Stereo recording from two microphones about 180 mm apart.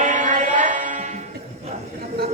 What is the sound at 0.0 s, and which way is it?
Music, 40° right (ahead or behind).